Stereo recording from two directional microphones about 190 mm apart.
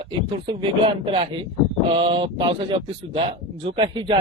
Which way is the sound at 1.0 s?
25° right (ahead or behind).